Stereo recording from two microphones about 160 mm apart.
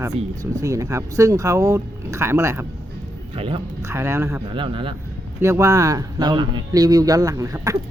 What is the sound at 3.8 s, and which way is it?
Speech, 15° right (ahead or behind).